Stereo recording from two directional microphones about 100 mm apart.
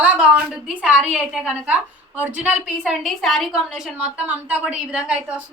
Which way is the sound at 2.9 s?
Centre (ahead or behind).